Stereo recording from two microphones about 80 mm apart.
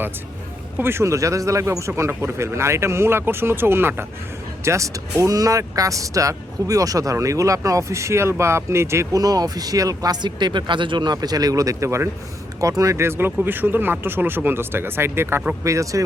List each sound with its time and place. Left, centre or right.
0.8 s speech: right
9.1 s speech: right
15.6 s speech: right